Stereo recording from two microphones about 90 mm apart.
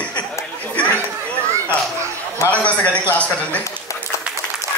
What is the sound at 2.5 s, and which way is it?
Speech, 15° left (ahead or behind).